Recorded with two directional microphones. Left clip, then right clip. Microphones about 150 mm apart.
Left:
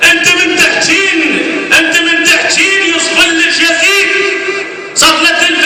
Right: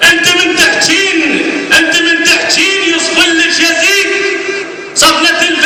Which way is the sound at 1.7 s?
25° right (ahead or behind).